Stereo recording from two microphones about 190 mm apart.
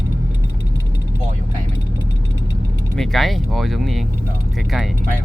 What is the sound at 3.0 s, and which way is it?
Speech, centre (ahead or behind).